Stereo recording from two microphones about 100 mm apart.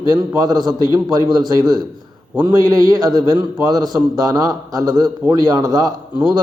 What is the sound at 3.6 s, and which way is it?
A man's voice, 40° right (ahead or behind).